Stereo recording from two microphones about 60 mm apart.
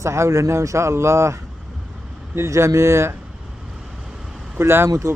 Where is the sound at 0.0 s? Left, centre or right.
Right.